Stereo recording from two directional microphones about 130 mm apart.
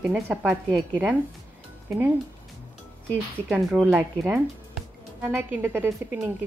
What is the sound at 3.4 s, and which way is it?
Speech, 10° right (ahead or behind).